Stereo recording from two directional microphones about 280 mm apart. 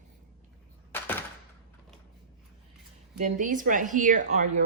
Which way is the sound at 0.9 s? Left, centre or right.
Centre.